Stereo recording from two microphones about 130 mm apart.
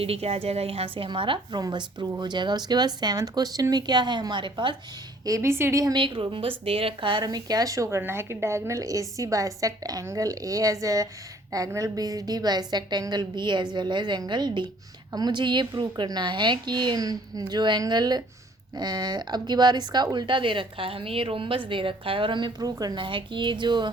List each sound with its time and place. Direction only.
0.0 s a woman's voice: 50° right (ahead or behind)
5.2 s a woman's voice: 25° right (ahead or behind)
6.0 s a woman's voice: 40° right (ahead or behind)